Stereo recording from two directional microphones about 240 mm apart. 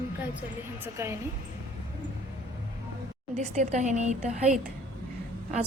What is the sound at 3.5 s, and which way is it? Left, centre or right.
A woman's voice, right.